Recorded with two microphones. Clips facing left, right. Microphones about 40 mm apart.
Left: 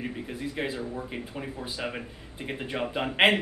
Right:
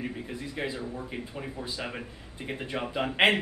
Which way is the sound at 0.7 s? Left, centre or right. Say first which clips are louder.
Left 2 dB; centre.